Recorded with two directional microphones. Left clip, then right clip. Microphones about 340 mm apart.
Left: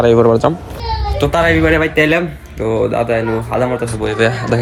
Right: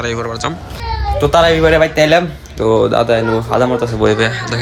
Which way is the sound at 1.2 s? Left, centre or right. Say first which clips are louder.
Right 3 dB; centre.